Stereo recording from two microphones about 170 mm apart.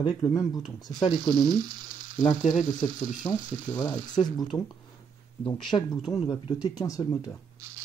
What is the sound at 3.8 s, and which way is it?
Speech, 25° left (ahead or behind).